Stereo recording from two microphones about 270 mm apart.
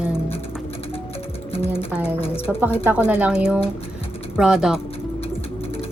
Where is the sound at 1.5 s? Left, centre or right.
Left.